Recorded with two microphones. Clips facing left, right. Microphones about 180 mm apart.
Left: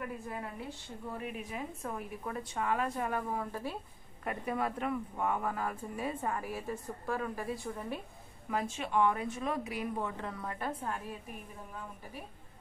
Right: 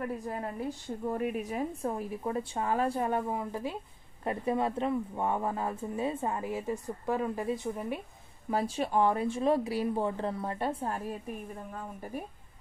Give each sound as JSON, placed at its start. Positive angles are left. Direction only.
{"t": 0.0, "sound": "a woman's voice", "side_deg": -40}
{"t": 4.2, "sound": "speech", "side_deg": -30}
{"t": 8.5, "sound": "a woman's voice", "side_deg": -35}